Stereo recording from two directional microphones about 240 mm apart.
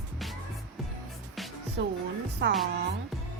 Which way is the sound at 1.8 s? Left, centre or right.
Right.